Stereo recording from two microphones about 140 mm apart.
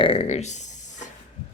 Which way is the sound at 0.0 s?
45° left (ahead or behind).